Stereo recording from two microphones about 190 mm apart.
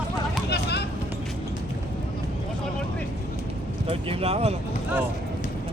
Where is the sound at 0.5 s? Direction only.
60° left (ahead or behind).